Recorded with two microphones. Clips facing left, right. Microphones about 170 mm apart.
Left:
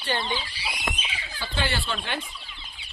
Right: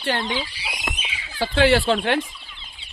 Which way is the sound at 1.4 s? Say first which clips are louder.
Right 13 dB; 90° right.